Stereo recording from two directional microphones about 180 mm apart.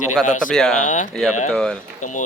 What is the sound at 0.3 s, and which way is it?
Speech, 45° left (ahead or behind).